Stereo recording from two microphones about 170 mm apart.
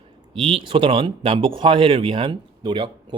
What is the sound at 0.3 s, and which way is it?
Speech, 30° right (ahead or behind).